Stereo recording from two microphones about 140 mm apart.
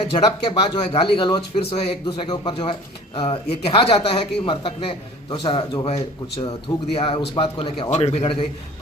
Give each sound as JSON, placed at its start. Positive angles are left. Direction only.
{"t": 0.0, "sound": "a man's voice", "side_deg": 40}